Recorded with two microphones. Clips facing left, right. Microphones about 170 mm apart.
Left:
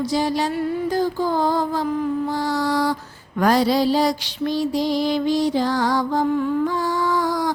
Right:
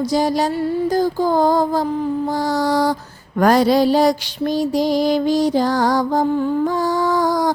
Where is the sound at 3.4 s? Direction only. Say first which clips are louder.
Right 4 dB; 50° right (ahead or behind).